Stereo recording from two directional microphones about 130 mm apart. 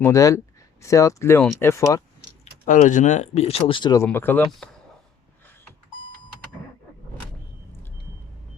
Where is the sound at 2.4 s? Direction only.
70° left (ahead or behind); by 3.9 s 40° left (ahead or behind).